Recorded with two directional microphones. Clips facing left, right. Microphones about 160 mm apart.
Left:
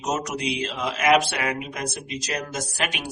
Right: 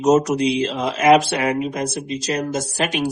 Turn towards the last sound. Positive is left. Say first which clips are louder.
# right 9 dB
turn(degrees=-40)  # may be behind; listen again after turning